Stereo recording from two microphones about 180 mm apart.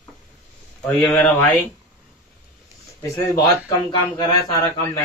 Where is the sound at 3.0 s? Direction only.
20° left (ahead or behind).